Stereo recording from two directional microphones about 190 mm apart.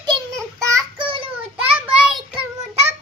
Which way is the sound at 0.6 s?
15° right (ahead or behind).